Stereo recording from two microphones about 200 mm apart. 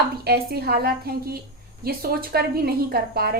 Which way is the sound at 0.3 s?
50° right (ahead or behind).